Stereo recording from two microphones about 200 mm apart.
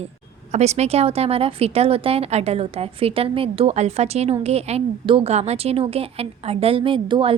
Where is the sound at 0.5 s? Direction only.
35° right (ahead or behind).